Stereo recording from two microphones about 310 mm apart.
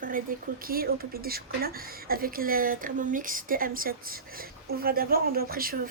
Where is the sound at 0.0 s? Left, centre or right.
Right.